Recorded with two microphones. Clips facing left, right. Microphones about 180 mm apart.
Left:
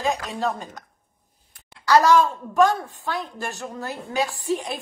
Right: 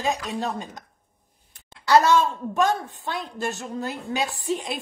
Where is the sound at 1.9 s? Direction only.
25° right (ahead or behind).